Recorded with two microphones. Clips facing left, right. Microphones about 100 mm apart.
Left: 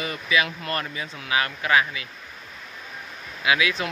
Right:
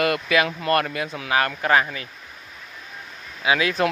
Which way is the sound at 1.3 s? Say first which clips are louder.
Right 2 dB; 45° right (ahead or behind).